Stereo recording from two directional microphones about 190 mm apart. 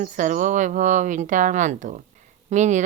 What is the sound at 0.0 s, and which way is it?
Speech, 45° right (ahead or behind).